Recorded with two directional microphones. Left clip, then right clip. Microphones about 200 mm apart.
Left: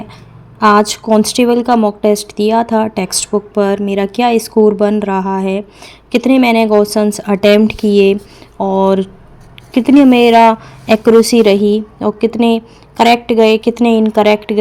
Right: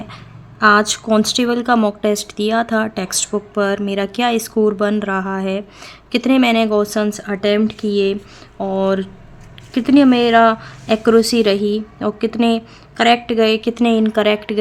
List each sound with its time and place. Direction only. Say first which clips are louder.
0.6 s a woman's voice: left 3 dB; 15° left (ahead or behind)